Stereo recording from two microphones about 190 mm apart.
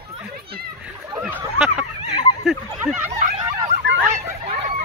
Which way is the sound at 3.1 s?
40° right (ahead or behind).